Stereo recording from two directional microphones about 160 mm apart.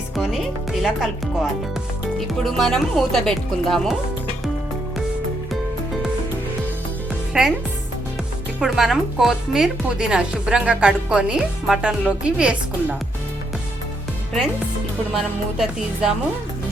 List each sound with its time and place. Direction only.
0.2 s speech: centre (ahead or behind)
2.1 s speech: centre (ahead or behind)
7.3 s speech: centre (ahead or behind)
8.6 s speech: centre (ahead or behind)
15.1 s speech: centre (ahead or behind)